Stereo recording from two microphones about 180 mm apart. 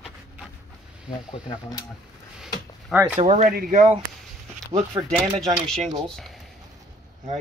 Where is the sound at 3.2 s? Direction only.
45° right (ahead or behind).